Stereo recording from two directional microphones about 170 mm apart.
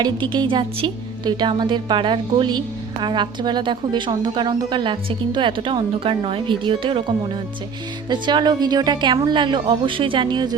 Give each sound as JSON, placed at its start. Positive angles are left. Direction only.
{"t": 0.0, "sound": "speech", "side_deg": -25}
{"t": 8.1, "sound": "speech", "side_deg": -25}